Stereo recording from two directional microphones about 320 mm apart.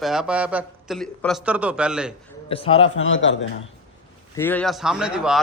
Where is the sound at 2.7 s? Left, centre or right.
Left.